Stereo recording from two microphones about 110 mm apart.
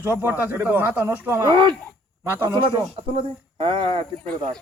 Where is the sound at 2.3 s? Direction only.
20° right (ahead or behind).